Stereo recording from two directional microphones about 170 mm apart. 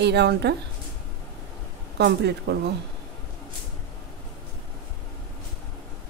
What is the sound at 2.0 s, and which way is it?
Speech, 75° right (ahead or behind).